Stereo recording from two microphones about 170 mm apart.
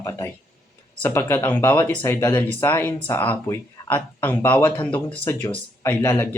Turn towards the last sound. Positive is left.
turn(degrees=15)  # may be behind; listen again after turning